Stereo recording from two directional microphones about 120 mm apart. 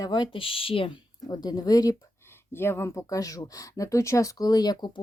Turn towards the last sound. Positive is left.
turn(degrees=35)  # may be behind; listen again after turning